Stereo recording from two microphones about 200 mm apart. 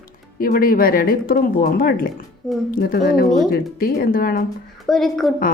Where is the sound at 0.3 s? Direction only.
45° left (ahead or behind).